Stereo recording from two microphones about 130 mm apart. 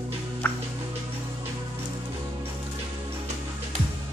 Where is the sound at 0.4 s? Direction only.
10° left (ahead or behind).